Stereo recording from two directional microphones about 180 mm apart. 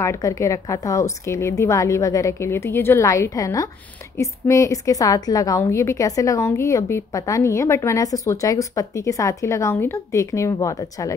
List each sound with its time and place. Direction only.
0.0 s a woman's voice: 15° left (ahead or behind)